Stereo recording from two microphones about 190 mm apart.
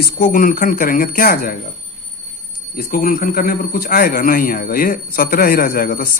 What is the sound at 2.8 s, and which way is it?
Speech, 50° left (ahead or behind).